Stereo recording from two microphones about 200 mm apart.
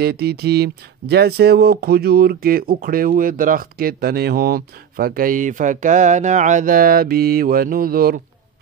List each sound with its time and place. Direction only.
0.0 s speech: 50° right (ahead or behind)